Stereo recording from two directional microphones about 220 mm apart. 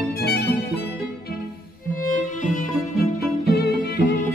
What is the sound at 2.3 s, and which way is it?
Violin, 35° left (ahead or behind).